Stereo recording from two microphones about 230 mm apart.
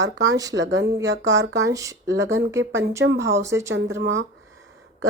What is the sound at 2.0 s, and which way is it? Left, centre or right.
A woman's voice, right.